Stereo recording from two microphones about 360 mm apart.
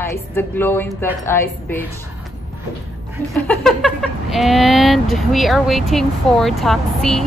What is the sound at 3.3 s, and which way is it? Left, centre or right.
Speech, centre.